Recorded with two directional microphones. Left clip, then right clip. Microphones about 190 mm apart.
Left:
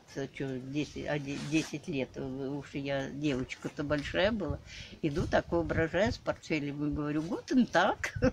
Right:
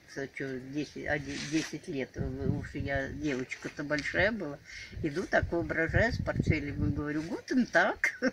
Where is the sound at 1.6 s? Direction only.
45° left (ahead or behind).